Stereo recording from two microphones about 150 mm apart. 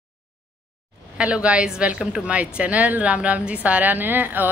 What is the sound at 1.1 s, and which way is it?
A woman's voice, 10° right (ahead or behind).